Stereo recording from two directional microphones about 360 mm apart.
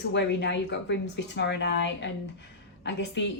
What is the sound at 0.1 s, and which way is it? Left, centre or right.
A woman's voice, left.